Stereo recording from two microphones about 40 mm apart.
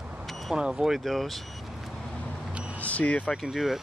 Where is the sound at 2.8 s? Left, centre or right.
Left.